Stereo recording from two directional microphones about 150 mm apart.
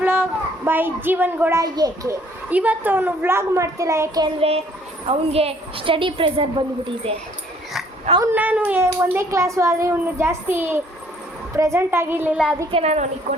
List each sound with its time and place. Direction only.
0.0 s a child's voice: 15° right (ahead or behind)
2.5 s a child's voice: 10° right (ahead or behind)
4.4 s a woman's voice: 40° right (ahead or behind)
8.2 s a child's voice: 15° right (ahead or behind)
12.7 s a woman's voice: 45° right (ahead or behind)